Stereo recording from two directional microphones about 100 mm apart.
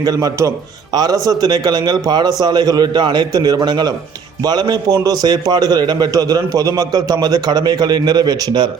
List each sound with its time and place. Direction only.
0.0 s a man's voice: 40° right (ahead or behind)